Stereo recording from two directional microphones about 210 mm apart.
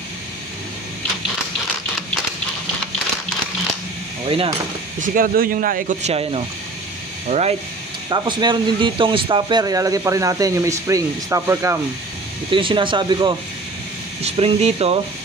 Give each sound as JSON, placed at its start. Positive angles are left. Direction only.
{"t": 4.3, "sound": "speech", "side_deg": -25}
{"t": 5.0, "sound": "speech", "side_deg": -40}
{"t": 8.1, "sound": "speech", "side_deg": -20}
{"t": 12.4, "sound": "speech", "side_deg": -25}